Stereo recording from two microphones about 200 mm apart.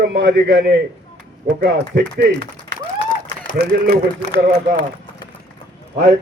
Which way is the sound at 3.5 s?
55° right (ahead or behind).